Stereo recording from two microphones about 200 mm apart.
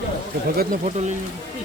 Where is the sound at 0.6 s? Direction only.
40° right (ahead or behind).